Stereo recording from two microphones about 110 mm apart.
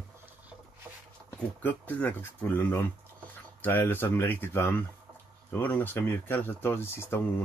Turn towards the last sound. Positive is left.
turn(degrees=20)  # may be behind; listen again after turning